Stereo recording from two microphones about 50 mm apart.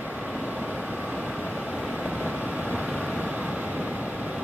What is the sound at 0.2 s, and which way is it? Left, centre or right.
Vehicle, centre.